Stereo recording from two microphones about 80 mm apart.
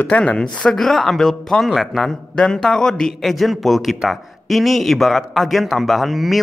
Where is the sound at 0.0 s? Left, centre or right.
Centre.